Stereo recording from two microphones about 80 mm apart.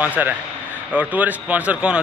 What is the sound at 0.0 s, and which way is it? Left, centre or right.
Speech, centre.